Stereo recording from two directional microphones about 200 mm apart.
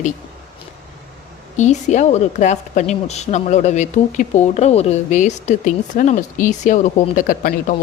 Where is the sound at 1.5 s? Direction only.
35° left (ahead or behind).